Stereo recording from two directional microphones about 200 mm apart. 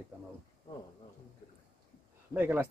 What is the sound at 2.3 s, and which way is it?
Speech, 10° right (ahead or behind).